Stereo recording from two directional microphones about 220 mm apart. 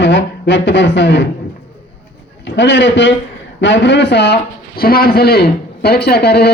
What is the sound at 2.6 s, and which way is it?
A man's voice, 55° left (ahead or behind).